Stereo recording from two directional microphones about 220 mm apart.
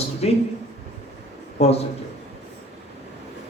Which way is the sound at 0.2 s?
30° left (ahead or behind).